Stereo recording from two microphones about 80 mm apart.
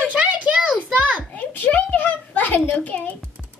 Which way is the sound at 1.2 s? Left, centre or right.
Left.